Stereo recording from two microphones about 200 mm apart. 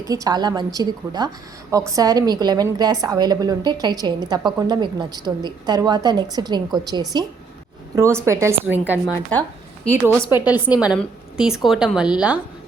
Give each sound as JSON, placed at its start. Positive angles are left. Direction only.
{"t": 0.1, "sound": "a woman's voice", "side_deg": -20}